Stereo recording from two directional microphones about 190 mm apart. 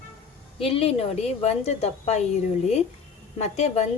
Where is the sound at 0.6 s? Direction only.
30° left (ahead or behind).